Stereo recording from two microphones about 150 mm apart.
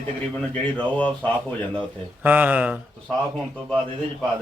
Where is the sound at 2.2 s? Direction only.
10° right (ahead or behind).